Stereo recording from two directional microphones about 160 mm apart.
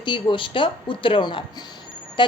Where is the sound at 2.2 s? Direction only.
30° left (ahead or behind).